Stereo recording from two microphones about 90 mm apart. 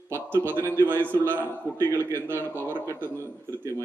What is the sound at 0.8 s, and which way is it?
A man's voice, 25° right (ahead or behind).